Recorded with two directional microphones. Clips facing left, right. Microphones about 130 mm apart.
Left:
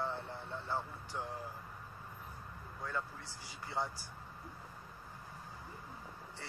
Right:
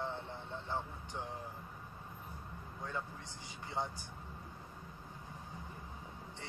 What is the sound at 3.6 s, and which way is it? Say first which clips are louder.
Speech: left 1 dB; 20° right (ahead or behind).